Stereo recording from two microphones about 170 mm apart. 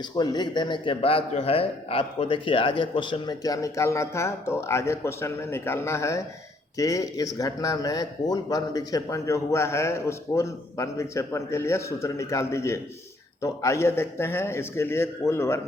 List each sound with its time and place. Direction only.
0.0 s a man's voice: 25° left (ahead or behind)